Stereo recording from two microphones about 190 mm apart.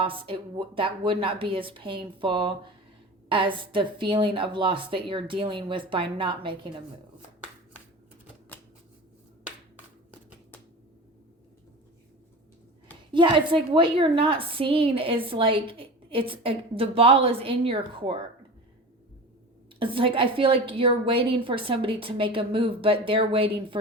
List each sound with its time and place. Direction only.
0.0 s a woman's voice: 25° right (ahead or behind)
13.1 s a woman's voice: 25° right (ahead or behind)
19.8 s a woman's voice: 30° right (ahead or behind)